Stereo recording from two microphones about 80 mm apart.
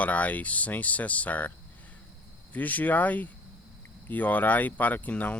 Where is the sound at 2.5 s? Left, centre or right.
Left.